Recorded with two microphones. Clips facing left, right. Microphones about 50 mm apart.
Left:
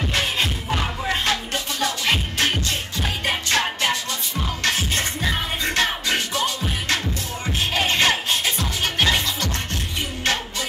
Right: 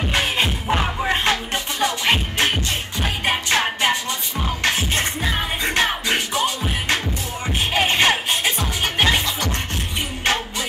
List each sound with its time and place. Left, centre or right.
0.0 s music: centre